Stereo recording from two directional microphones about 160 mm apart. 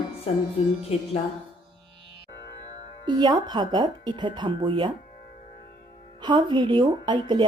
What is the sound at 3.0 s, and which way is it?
A woman's voice, 25° right (ahead or behind).